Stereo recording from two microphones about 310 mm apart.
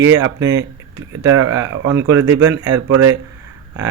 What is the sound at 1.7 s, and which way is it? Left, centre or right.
Speech, right.